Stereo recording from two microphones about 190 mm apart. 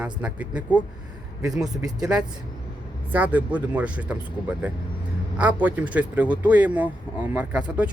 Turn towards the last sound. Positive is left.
turn(degrees=-10)  # may be behind; listen again after turning